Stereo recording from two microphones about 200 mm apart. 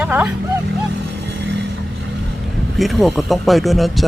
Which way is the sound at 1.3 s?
60° right (ahead or behind).